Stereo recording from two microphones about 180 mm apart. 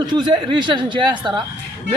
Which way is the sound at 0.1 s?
25° right (ahead or behind).